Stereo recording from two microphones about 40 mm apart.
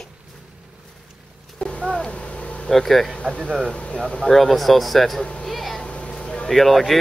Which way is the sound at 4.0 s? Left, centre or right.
Centre.